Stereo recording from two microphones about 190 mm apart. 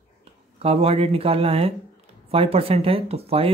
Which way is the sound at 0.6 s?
30° right (ahead or behind).